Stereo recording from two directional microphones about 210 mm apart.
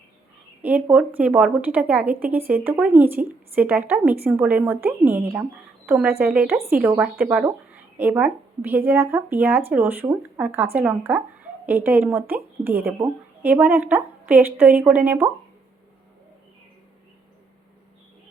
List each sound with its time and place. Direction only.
0.6 s speech: 10° right (ahead or behind)